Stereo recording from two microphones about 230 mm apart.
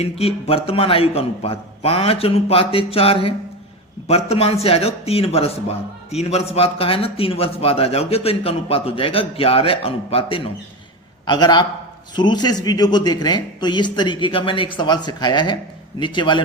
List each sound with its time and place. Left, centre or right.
0.0 s a man's voice: left